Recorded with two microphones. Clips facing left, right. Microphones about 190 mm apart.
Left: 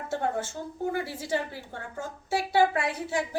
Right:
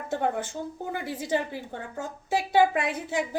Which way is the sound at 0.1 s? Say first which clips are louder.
Right 2 dB; 20° right (ahead or behind).